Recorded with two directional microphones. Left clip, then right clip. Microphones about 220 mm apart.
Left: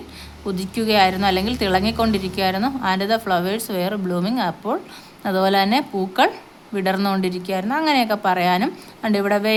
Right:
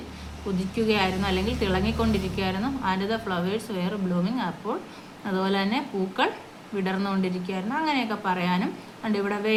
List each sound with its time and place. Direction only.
0.8 s a woman's voice: 50° left (ahead or behind)